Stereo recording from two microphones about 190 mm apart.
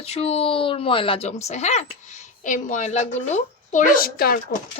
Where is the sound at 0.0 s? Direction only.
30° left (ahead or behind); by 4.4 s 50° left (ahead or behind).